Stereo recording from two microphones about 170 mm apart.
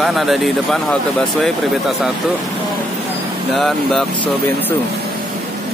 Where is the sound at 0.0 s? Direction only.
Centre (ahead or behind).